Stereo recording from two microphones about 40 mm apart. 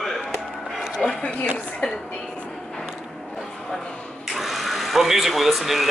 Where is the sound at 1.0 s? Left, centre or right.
Centre.